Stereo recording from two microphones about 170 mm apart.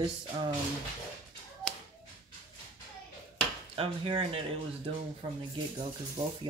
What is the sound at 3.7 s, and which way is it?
Speech, 35° right (ahead or behind).